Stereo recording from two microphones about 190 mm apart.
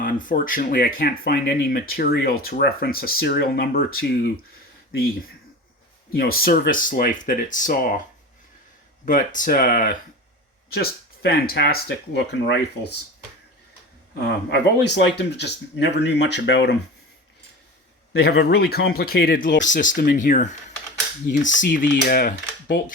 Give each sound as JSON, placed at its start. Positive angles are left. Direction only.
{"t": 0.0, "sound": "speech", "side_deg": 45}
{"t": 6.1, "sound": "speech", "side_deg": 50}
{"t": 9.0, "sound": "speech", "side_deg": 45}
{"t": 14.2, "sound": "speech", "side_deg": 65}
{"t": 18.1, "sound": "speech", "side_deg": 55}